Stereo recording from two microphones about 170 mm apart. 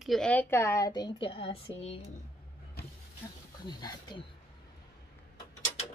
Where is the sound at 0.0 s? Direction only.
5° left (ahead or behind); by 2.0 s 35° left (ahead or behind).